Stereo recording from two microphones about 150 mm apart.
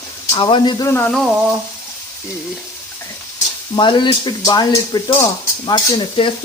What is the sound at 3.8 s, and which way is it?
Speech, 30° left (ahead or behind).